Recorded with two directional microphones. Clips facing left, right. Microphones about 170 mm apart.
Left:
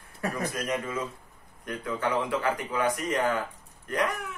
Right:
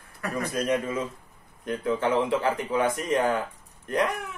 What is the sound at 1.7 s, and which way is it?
Speech, 25° right (ahead or behind).